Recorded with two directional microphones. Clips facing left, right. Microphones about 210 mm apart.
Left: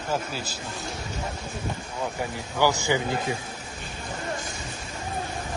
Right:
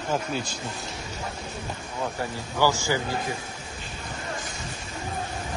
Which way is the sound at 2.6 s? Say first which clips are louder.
Left 1 dB; 20° left (ahead or behind).